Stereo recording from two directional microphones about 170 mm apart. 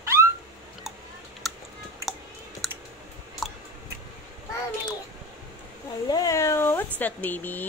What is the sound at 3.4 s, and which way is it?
Tick-tock, centre (ahead or behind).